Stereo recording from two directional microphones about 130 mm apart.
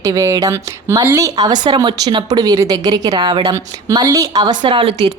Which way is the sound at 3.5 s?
25° right (ahead or behind).